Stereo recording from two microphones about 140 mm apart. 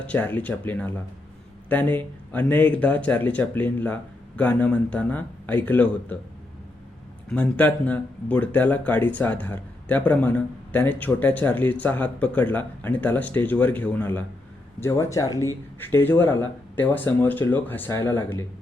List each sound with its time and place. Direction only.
0.1 s speech: 10° left (ahead or behind)
7.3 s speech: 10° left (ahead or behind)